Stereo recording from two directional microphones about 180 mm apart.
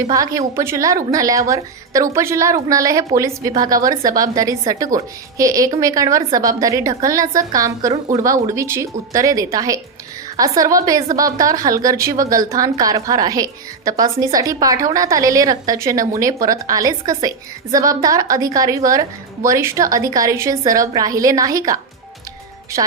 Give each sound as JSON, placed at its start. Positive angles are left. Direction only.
{"t": 0.1, "sound": "a woman's voice", "side_deg": -20}